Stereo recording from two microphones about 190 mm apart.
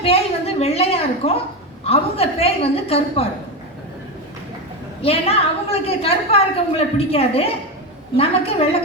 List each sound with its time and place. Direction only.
0.0 s a sound: 30° left (ahead or behind)
1.8 s a woman's voice: 30° left (ahead or behind)
5.0 s a woman's voice: 30° left (ahead or behind)